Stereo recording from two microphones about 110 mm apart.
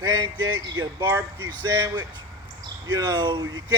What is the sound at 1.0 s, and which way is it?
Speech, 25° right (ahead or behind).